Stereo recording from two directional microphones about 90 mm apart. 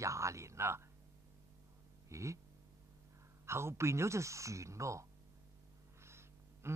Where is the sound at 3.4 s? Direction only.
30° right (ahead or behind).